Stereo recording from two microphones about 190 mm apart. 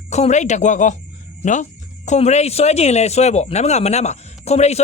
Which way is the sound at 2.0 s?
35° left (ahead or behind).